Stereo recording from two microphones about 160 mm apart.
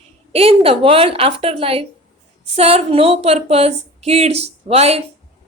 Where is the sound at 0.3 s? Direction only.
35° right (ahead or behind).